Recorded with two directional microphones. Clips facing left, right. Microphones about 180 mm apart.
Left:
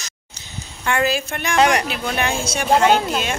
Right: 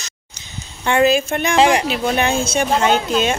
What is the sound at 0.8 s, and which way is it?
Speech, 20° right (ahead or behind).